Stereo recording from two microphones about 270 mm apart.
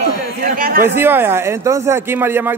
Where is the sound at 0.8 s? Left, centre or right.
Centre.